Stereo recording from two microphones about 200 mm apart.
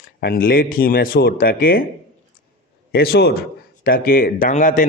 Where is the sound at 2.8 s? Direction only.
50° left (ahead or behind).